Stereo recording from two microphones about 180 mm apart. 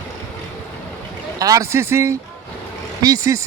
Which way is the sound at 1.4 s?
20° right (ahead or behind).